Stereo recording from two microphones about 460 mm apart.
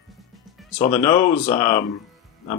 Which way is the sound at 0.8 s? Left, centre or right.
Centre.